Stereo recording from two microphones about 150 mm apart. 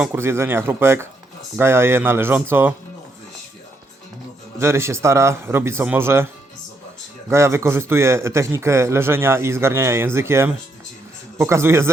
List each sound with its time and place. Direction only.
0.0 s speech: 15° right (ahead or behind)
4.5 s speech: 20° right (ahead or behind)
7.3 s speech: 15° right (ahead or behind)